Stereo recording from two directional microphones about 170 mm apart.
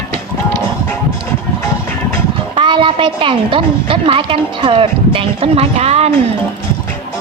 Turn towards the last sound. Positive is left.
turn(degrees=-40)  # may be behind; listen again after turning